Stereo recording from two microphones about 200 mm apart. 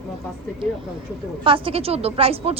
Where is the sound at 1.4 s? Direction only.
25° right (ahead or behind).